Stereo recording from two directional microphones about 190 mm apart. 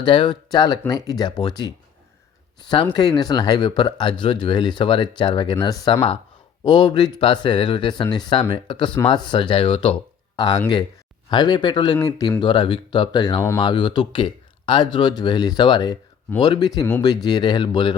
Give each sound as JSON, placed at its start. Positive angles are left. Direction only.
{"t": 0.0, "sound": "speech", "side_deg": 25}